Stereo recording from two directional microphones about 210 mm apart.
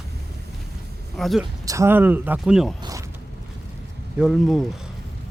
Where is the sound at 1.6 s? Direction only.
15° right (ahead or behind).